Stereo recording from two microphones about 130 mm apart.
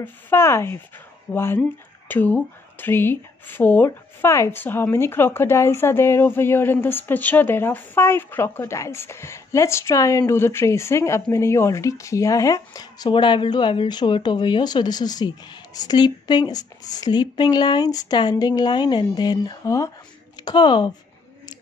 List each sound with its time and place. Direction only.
0.0 s speech: 20° left (ahead or behind); by 20.9 s 35° left (ahead or behind)